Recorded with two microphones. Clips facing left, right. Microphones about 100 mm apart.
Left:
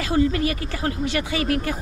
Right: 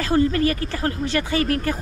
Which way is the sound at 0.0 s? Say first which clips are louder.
Right 2 dB; 40° right (ahead or behind).